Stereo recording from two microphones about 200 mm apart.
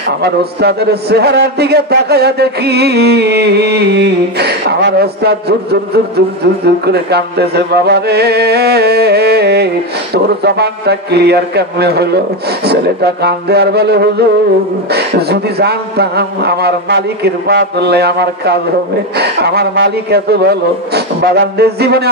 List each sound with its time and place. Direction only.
0.2 s a man's voice: 55° right (ahead or behind)